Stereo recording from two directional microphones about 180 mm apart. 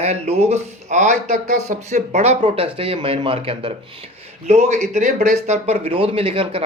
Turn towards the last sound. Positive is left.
turn(degrees=-30)  # may be behind; listen again after turning